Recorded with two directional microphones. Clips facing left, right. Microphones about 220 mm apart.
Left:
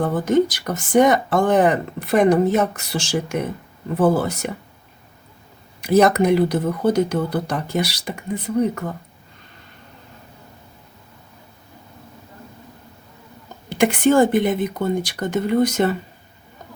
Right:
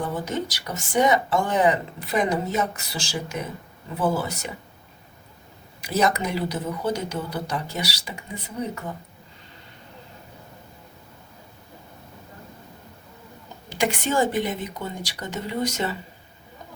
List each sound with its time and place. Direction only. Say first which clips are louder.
0.0 s speech: left 10 dB; 55° left (ahead or behind)
5.8 s speech: left 8 dB; 60° left (ahead or behind)
13.7 s speech: left 9 dB; 60° left (ahead or behind)